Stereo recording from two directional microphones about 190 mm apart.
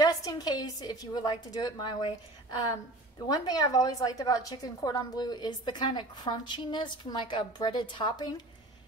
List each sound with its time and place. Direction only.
0.0 s a woman's voice: 20° left (ahead or behind)
3.3 s a woman's voice: 20° left (ahead or behind)